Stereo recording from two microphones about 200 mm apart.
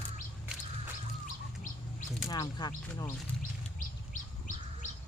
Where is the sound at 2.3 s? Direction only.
20° left (ahead or behind).